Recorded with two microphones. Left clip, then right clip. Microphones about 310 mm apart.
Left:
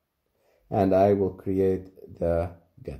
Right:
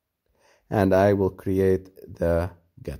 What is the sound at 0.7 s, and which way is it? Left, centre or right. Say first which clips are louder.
Speech: right 1 dB; right.